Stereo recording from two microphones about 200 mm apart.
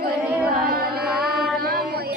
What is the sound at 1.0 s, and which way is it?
Music, 5° right (ahead or behind).